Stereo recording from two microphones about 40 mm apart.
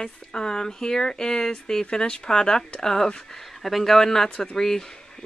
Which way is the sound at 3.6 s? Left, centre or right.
Centre.